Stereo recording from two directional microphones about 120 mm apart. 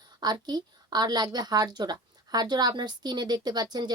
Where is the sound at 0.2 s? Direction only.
35° right (ahead or behind).